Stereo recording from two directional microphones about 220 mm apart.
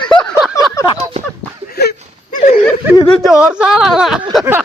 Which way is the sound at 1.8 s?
40° left (ahead or behind).